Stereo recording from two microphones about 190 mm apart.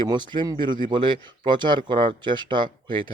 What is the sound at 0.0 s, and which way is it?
Speech, 25° right (ahead or behind).